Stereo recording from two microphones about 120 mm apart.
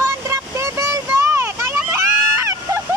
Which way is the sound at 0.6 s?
25° right (ahead or behind).